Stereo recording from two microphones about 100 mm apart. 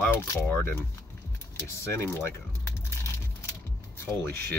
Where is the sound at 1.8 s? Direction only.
25° left (ahead or behind).